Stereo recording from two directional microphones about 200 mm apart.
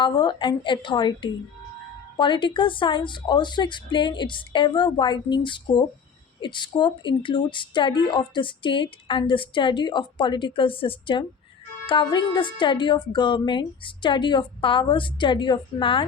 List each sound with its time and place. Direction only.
0.0 s a woman's voice: 25° left (ahead or behind)